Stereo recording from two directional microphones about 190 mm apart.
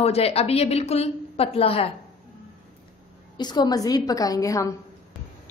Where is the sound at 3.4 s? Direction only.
20° left (ahead or behind).